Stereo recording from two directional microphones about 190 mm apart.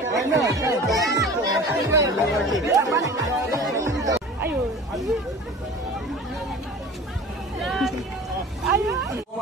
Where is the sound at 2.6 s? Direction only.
15° right (ahead or behind).